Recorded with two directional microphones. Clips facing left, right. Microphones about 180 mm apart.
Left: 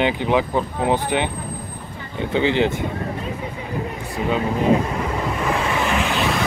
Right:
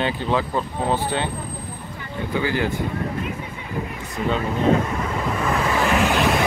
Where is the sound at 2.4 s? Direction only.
20° left (ahead or behind).